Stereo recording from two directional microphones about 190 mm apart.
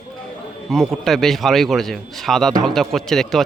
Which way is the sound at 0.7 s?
Centre (ahead or behind).